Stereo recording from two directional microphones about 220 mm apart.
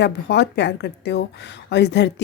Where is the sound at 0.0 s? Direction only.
50° left (ahead or behind).